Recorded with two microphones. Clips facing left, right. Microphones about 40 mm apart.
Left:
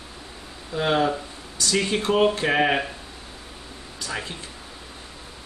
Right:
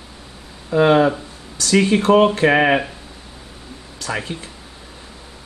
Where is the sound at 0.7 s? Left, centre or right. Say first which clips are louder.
Right 8 dB; right.